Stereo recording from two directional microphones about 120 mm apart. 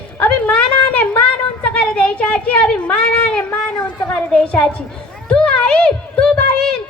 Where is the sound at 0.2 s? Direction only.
10° left (ahead or behind).